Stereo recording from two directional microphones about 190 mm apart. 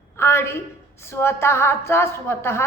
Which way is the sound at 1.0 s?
15° left (ahead or behind).